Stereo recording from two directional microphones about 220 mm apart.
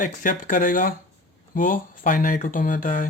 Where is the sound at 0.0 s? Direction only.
35° left (ahead or behind).